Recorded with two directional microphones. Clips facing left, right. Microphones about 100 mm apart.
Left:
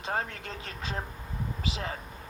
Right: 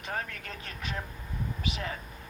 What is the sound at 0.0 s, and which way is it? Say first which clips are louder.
Speech: left 4 dB; 30° left (ahead or behind).